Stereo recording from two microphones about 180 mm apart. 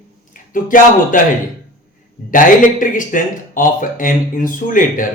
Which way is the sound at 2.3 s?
50° left (ahead or behind).